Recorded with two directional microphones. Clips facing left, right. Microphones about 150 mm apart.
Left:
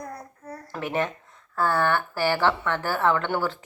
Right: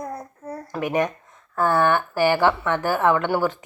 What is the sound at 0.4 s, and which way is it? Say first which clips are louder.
Babbling: right 6 dB; 25° right (ahead or behind).